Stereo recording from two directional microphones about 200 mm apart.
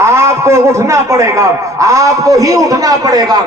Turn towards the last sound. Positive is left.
turn(degrees=-20)  # may be behind; listen again after turning